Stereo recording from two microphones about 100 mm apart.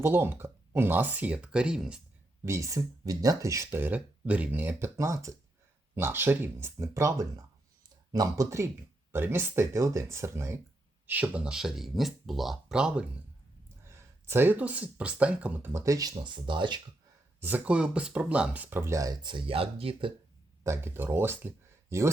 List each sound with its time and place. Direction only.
0.0 s speech: 20° right (ahead or behind); by 2.0 s 5° right (ahead or behind)
2.4 s speech: 30° right (ahead or behind)
4.9 s speech: 30° right (ahead or behind)
11.0 s speech: 15° right (ahead or behind)
13.8 s speech: 25° right (ahead or behind)
15.7 s speech: 30° right (ahead or behind); by 16.8 s 50° right (ahead or behind)
17.4 s speech: 15° right (ahead or behind); by 19.1 s 30° right (ahead or behind)
19.2 s speech: 55° right (ahead or behind)
20.7 s speech: 25° right (ahead or behind)